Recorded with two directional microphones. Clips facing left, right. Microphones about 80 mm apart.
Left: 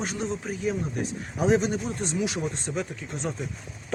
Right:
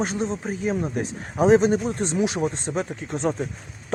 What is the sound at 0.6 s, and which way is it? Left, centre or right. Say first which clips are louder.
Speech: right 4 dB; right.